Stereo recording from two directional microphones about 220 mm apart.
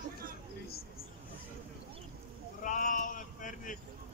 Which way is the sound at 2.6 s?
35° left (ahead or behind).